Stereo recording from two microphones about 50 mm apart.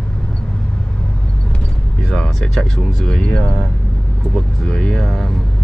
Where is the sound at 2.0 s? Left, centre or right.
Centre.